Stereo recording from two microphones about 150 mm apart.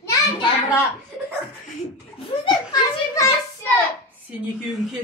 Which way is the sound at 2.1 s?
30° left (ahead or behind).